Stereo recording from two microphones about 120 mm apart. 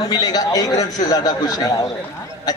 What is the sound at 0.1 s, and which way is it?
A man's voice, 30° left (ahead or behind).